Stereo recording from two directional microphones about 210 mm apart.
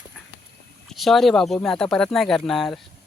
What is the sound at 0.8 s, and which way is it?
Speech, centre (ahead or behind).